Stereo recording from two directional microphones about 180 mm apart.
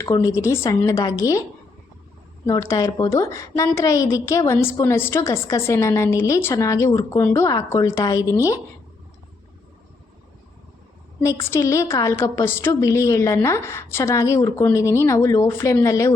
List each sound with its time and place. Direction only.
0.0 s a woman's voice: 20° left (ahead or behind)
2.5 s a woman's voice: 15° left (ahead or behind)
11.2 s a woman's voice: 15° left (ahead or behind)